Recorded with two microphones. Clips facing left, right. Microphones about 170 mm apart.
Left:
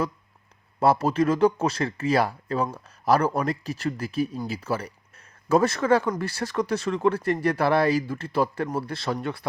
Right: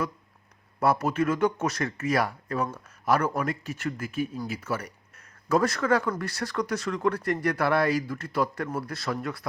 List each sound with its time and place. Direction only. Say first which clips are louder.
0.8 s speech: left 3 dB; 30° left (ahead or behind)